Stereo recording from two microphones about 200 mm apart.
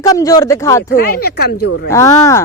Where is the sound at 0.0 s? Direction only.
15° left (ahead or behind).